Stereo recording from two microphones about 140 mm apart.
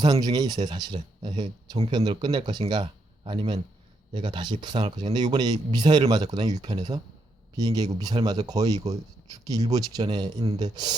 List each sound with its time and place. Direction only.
0.0 s speech: 30° right (ahead or behind)
2.8 s speech: 45° right (ahead or behind)
4.1 s speech: 30° right (ahead or behind)
4.8 s speech: 50° right (ahead or behind)
5.1 s speech: 30° right (ahead or behind)